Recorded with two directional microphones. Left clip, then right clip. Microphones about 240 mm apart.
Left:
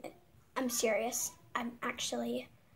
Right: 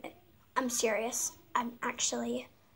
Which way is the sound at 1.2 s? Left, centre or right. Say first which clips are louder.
Right 5 dB; centre.